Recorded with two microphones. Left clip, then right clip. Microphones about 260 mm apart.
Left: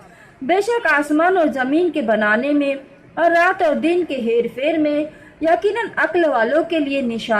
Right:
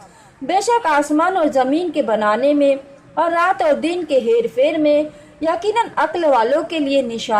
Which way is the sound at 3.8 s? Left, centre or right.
Right.